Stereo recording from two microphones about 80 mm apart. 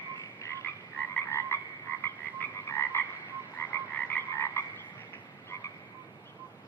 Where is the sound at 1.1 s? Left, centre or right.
Left.